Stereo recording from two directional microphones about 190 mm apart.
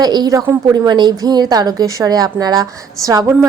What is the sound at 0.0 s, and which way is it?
A woman's voice, 20° right (ahead or behind).